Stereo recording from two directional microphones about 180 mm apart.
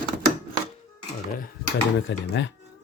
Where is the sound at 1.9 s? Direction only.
75° left (ahead or behind).